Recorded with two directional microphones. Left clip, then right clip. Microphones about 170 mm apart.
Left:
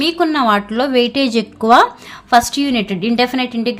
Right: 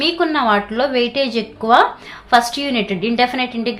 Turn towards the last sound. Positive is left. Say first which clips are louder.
# left 2 dB
turn(degrees=45)  # may be behind; listen again after turning